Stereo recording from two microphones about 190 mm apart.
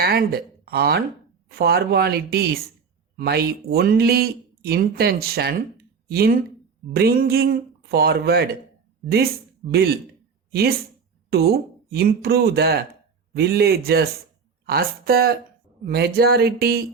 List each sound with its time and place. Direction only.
0.0 s speech: 55° right (ahead or behind)